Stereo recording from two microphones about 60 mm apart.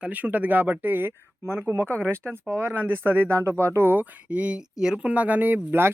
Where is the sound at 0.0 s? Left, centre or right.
Right.